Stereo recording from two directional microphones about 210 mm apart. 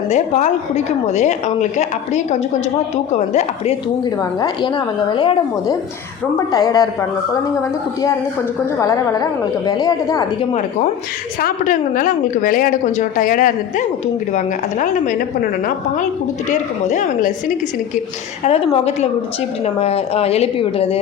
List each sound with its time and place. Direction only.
0.1 s a woman's voice: 35° left (ahead or behind)
4.2 s a woman's voice: 20° left (ahead or behind)
8.8 s a woman's voice: 15° left (ahead or behind)
11.3 s a woman's voice: 40° left (ahead or behind)
16.5 s a woman's voice: 35° left (ahead or behind)
18.4 s a woman's voice: 30° left (ahead or behind)